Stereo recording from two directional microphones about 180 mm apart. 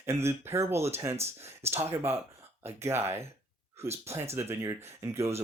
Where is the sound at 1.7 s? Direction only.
15° right (ahead or behind).